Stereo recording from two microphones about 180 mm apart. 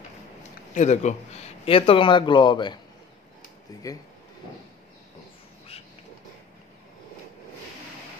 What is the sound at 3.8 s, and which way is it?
Speech, 20° left (ahead or behind).